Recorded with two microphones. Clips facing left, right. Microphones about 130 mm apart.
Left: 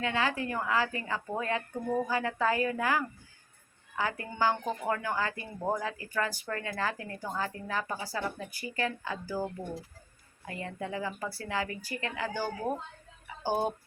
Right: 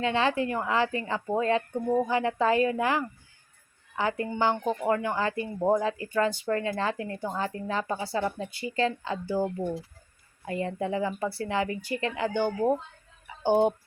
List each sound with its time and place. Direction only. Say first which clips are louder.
0.0 s speech: right 5 dB; 25° right (ahead or behind)